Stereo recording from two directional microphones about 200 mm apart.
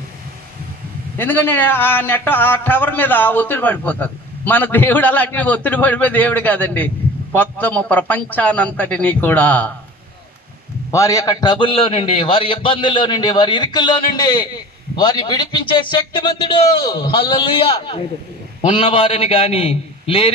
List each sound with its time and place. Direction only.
1.1 s a man's voice: 10° left (ahead or behind)
10.9 s a man's voice: 15° left (ahead or behind)